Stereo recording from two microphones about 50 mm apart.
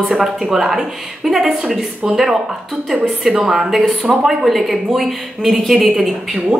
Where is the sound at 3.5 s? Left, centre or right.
Centre.